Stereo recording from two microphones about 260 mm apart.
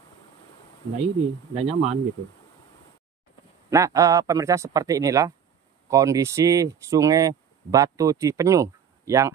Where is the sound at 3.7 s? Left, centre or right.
Centre.